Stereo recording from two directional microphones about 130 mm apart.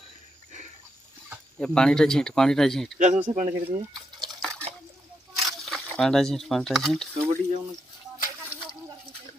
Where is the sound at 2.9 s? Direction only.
70° right (ahead or behind).